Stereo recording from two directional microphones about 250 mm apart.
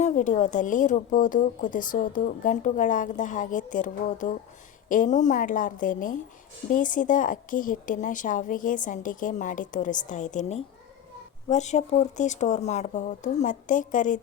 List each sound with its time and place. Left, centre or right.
0.0 s speech: left